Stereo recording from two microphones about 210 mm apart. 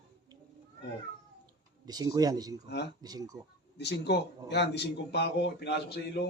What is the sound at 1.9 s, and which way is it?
Speech, 20° right (ahead or behind).